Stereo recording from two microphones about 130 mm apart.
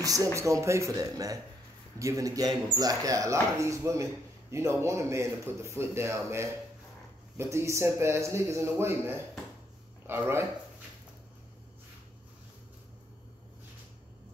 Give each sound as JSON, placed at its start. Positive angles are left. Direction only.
{"t": 0.0, "sound": "speech", "side_deg": -25}